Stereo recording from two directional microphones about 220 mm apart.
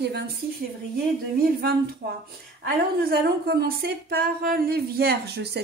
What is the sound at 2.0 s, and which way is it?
A woman's voice, 45° right (ahead or behind).